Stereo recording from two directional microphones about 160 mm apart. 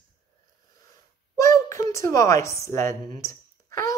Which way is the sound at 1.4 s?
20° left (ahead or behind).